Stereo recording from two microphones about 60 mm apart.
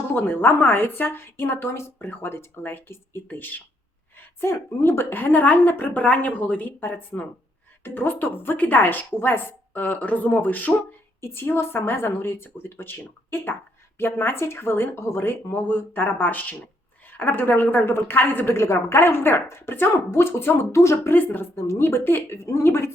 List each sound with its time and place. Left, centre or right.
0.1 s a woman's voice: left
11.2 s a woman's voice: left